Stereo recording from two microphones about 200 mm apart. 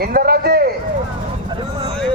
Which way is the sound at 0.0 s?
50° right (ahead or behind).